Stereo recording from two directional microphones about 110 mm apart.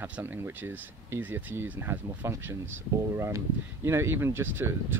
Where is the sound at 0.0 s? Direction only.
20° right (ahead or behind).